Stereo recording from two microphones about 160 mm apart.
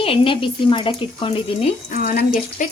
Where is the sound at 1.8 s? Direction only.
55° left (ahead or behind).